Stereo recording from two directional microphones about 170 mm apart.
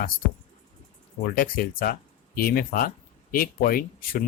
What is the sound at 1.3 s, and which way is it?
Speech, 60° left (ahead or behind).